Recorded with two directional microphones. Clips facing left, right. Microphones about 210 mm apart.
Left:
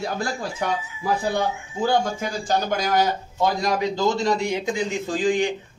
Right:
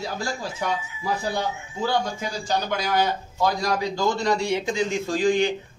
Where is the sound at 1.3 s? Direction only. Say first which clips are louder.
Left 3 dB; 50° left (ahead or behind).